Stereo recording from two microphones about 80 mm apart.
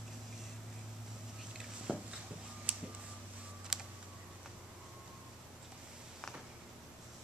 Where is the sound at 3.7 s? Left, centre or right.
Centre.